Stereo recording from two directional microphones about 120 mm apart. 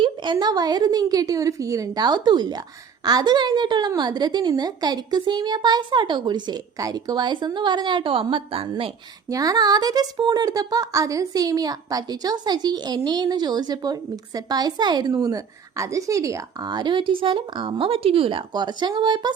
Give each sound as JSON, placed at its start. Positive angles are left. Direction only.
{"t": 0.0, "sound": "a woman's voice", "side_deg": -40}
{"t": 9.3, "sound": "a woman's voice", "side_deg": -30}